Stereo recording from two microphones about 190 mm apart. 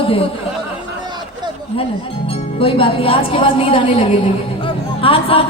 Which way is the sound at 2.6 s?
30° left (ahead or behind).